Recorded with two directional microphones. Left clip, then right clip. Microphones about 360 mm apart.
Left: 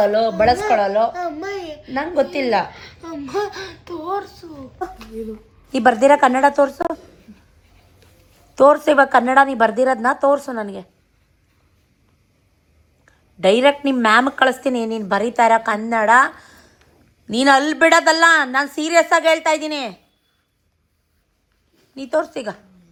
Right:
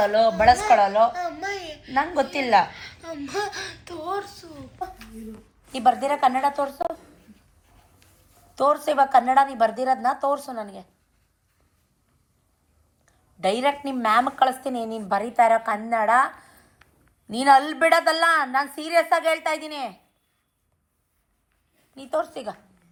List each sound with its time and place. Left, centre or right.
0.0 s a woman's voice: centre
1.1 s a sound: centre
1.9 s a woman's voice: centre
2.7 s a sound: centre
5.9 s a woman's voice: centre
9.0 s a woman's voice: centre
13.4 s a woman's voice: centre
22.1 s a woman's voice: centre